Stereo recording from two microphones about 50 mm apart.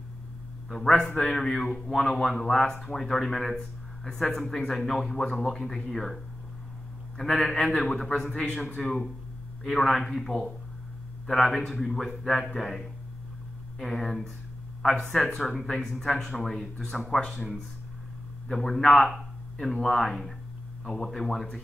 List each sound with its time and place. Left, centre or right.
0.7 s a man's voice: centre
7.9 s a man's voice: centre
18.5 s a man's voice: centre
19.0 s a sound: centre
19.7 s a man's voice: centre